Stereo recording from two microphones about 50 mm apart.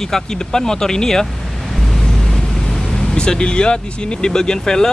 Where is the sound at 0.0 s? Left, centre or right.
Centre.